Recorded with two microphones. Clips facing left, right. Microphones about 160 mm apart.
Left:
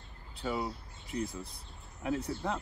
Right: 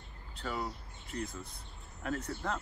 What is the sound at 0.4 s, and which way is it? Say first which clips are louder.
Speech: left 3 dB; 5° left (ahead or behind).